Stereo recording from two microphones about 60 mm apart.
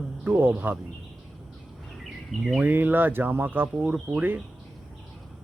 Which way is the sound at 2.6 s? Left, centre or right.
Right.